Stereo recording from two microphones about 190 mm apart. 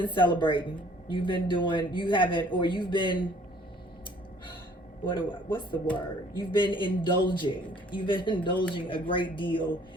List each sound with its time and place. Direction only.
0.0 s speech: 25° left (ahead or behind)
5.0 s speech: 25° left (ahead or behind)